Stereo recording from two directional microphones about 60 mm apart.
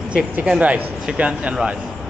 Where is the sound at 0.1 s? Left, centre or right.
Right.